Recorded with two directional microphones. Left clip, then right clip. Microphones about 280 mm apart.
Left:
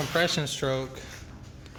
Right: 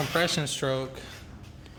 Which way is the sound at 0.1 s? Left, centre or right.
Centre.